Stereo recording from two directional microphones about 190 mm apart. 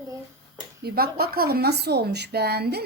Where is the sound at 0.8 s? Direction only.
55° right (ahead or behind).